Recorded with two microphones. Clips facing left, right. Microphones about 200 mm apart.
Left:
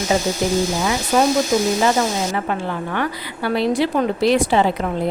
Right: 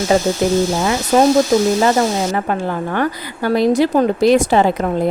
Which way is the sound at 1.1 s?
45° right (ahead or behind).